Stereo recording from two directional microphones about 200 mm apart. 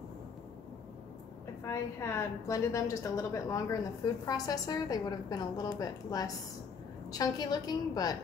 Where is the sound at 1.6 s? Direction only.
15° left (ahead or behind).